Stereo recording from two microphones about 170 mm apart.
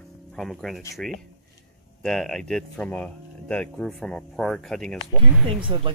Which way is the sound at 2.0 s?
5° left (ahead or behind).